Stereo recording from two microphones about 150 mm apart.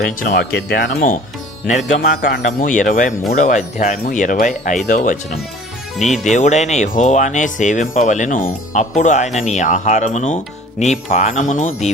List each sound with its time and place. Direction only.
0.2 s speech: 70° left (ahead or behind)
1.9 s speech: 75° left (ahead or behind)
2.5 s speech: 60° left (ahead or behind)